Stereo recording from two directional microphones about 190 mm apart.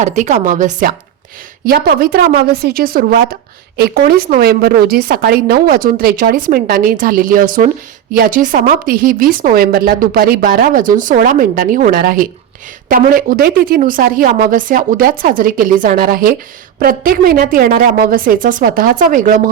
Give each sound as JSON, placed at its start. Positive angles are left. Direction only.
{"t": 0.0, "sound": "a woman's voice", "side_deg": -40}
{"t": 1.6, "sound": "a woman's voice", "side_deg": -55}